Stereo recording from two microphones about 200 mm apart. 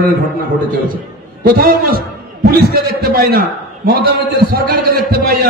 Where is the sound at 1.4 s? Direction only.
50° right (ahead or behind).